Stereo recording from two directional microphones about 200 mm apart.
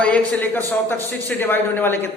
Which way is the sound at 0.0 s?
5° left (ahead or behind).